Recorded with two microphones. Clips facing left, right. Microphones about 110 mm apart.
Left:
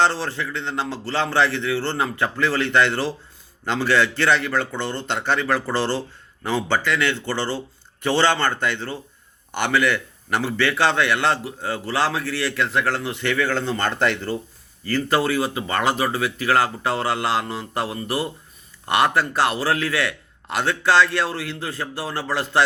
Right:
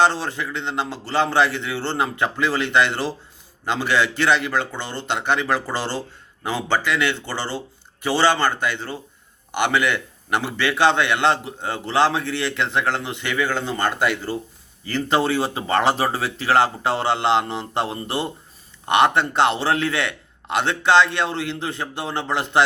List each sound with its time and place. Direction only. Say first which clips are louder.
0.0 s a man's voice: right 1 dB; 15° right (ahead or behind)
14.8 s a man's voice: even; 20° right (ahead or behind)